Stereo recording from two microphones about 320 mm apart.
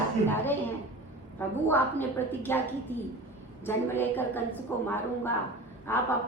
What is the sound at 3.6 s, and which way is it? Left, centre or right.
A woman's voice, centre.